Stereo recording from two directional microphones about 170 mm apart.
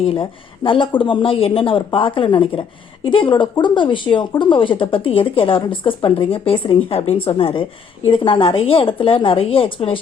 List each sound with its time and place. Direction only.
0.0 s speech: 30° left (ahead or behind)